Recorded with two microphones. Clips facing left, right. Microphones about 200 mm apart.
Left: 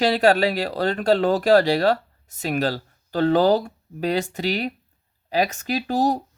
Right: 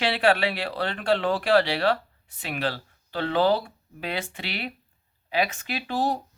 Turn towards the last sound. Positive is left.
turn(degrees=40)  # may be behind; listen again after turning